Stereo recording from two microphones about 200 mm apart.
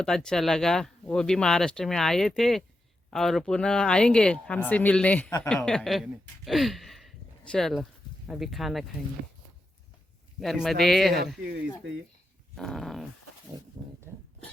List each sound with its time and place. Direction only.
0.0 s speech: 5° left (ahead or behind)
10.4 s speech: centre (ahead or behind)
12.5 s speech: centre (ahead or behind)
13.8 s dog: 20° right (ahead or behind)